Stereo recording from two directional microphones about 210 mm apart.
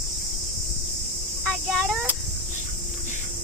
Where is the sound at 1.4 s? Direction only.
5° left (ahead or behind).